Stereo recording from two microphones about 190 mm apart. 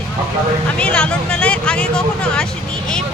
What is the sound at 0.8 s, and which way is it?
Speech, 5° left (ahead or behind).